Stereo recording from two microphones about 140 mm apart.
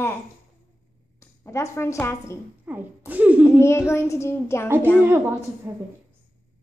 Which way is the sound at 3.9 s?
20° left (ahead or behind).